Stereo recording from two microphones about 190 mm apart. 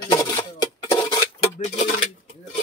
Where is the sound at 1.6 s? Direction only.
40° left (ahead or behind).